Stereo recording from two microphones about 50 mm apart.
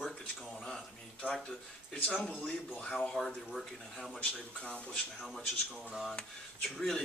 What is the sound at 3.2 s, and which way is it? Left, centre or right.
Speech, centre.